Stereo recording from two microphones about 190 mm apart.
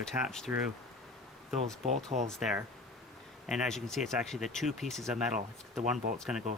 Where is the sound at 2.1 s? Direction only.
40° right (ahead or behind).